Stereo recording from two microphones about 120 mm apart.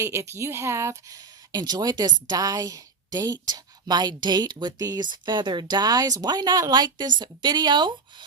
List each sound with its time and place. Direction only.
0.0 s speech: 25° right (ahead or behind)